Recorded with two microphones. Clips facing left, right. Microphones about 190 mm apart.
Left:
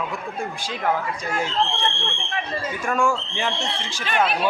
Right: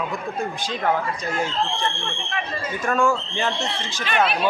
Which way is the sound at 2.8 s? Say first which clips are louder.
Right 2 dB; 10° left (ahead or behind).